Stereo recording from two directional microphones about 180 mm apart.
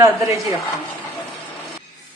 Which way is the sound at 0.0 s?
15° right (ahead or behind).